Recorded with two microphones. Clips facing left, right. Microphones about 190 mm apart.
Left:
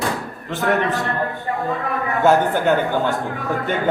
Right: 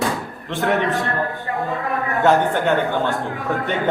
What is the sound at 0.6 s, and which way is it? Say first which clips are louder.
Speech: even; centre (ahead or behind).